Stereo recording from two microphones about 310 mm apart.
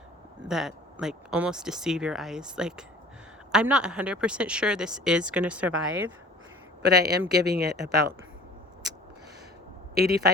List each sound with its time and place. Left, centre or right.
0.4 s speech: centre
6.8 s speech: right
9.9 s speech: right